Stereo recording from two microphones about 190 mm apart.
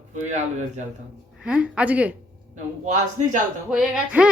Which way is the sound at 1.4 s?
5° right (ahead or behind).